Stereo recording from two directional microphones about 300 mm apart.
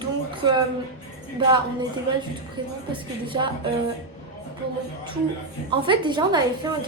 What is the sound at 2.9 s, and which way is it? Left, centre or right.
Speech, centre.